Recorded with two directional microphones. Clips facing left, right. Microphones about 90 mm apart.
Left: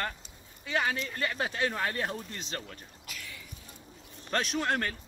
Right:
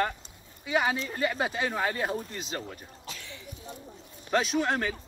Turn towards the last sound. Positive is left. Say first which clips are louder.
# right 3 dB
turn(degrees=-5)  # may be behind; listen again after turning